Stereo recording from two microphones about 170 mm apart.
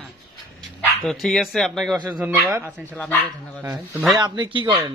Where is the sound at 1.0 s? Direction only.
Centre (ahead or behind).